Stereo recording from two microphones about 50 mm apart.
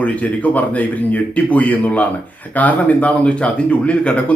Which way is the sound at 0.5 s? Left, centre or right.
Left.